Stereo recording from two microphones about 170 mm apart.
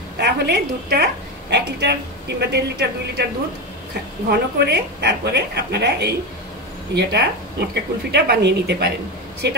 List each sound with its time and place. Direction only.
0.2 s a woman's voice: 75° right (ahead or behind)
4.3 s a woman's voice: 75° right (ahead or behind)